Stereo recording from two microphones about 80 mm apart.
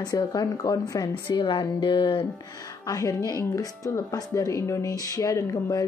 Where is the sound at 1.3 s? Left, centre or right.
Left.